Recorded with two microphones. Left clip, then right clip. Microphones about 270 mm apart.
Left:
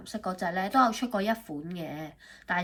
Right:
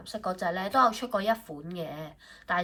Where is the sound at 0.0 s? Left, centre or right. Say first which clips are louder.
Right 2 dB; centre.